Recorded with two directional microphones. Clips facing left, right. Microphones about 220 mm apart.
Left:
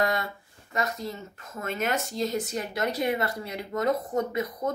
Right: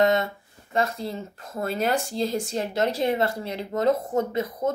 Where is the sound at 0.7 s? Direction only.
30° right (ahead or behind).